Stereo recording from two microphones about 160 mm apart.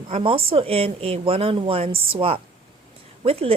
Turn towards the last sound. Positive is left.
turn(degrees=-35)  # may be behind; listen again after turning